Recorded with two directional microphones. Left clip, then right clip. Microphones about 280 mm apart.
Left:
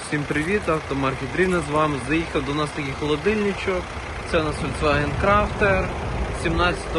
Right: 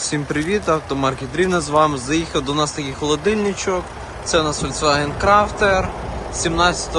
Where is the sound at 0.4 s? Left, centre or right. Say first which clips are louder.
Right 4 dB; centre.